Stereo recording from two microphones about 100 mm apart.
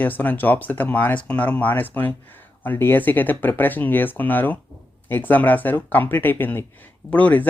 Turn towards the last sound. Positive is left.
turn(degrees=15)  # may be behind; listen again after turning